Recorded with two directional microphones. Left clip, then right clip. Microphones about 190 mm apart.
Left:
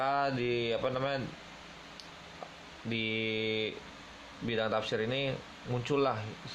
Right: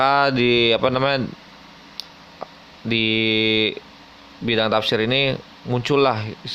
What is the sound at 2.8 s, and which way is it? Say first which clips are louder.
Speech: right 14 dB; 45° right (ahead or behind).